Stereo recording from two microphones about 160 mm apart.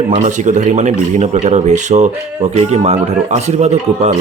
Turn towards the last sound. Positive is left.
turn(degrees=-45)  # may be behind; listen again after turning